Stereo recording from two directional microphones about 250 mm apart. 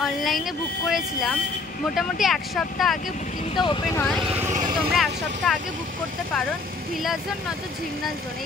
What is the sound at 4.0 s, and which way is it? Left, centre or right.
Vehicle, centre.